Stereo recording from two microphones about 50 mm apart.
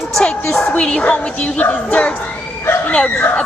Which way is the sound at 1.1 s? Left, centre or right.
Left.